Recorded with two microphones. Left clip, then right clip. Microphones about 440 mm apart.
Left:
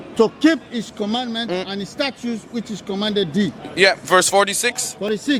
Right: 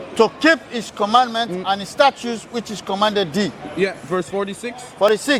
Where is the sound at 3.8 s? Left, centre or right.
Left.